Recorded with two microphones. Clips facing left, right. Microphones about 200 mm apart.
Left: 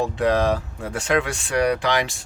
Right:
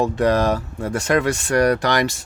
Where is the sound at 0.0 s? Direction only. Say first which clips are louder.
Right 2 dB; 45° right (ahead or behind).